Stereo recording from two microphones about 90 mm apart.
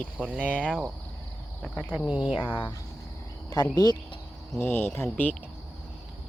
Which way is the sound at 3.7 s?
50° left (ahead or behind).